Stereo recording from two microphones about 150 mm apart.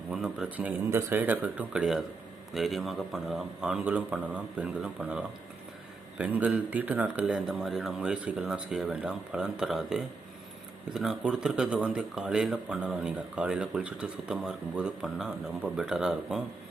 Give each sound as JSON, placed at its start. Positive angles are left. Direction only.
{"t": 0.1, "sound": "speech", "side_deg": -5}